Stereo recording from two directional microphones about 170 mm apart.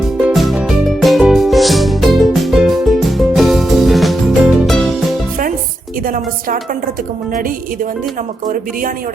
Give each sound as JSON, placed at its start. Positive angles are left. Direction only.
{"t": 0.2, "sound": "music", "side_deg": 0}
{"t": 6.1, "sound": "a woman's voice", "side_deg": -55}